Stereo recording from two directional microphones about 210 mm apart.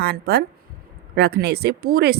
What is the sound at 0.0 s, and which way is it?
Speech, 50° right (ahead or behind).